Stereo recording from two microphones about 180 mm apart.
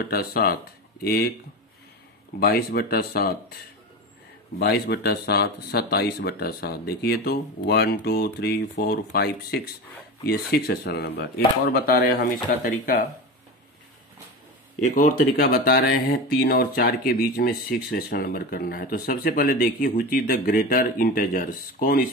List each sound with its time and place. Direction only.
0.1 s speech: 60° left (ahead or behind)
2.4 s speech: 60° left (ahead or behind)
4.6 s speech: 65° left (ahead or behind); by 13.0 s 50° left (ahead or behind)
15.0 s speech: 50° left (ahead or behind)